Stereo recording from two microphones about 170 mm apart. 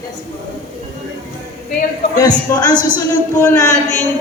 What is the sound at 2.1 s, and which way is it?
A woman's voice, 20° left (ahead or behind).